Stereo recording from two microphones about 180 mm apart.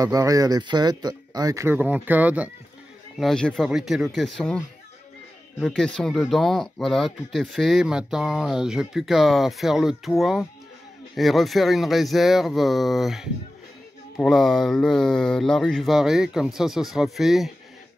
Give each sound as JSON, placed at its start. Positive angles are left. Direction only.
{"t": 0.0, "sound": "speech", "side_deg": -20}
{"t": 3.2, "sound": "speech", "side_deg": 0}